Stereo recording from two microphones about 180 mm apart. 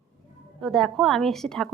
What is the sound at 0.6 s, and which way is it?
A woman's voice, centre (ahead or behind).